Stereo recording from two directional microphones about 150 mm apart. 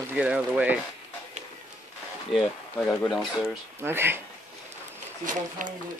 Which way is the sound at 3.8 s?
15° right (ahead or behind).